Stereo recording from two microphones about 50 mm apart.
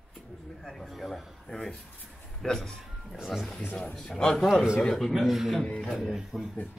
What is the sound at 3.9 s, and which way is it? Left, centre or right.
Speech, centre.